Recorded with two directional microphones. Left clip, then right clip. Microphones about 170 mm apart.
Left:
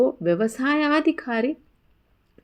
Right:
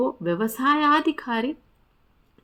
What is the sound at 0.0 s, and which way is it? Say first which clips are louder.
Speech: left 4 dB; 5° left (ahead or behind).